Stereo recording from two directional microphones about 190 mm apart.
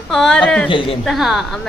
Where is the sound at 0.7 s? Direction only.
30° left (ahead or behind).